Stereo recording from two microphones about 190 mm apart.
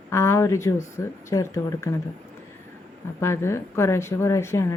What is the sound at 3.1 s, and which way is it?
Speech, 15° left (ahead or behind).